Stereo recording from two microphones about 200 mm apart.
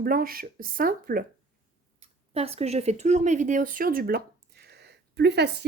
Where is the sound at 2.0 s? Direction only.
30° right (ahead or behind); by 5.6 s 55° right (ahead or behind).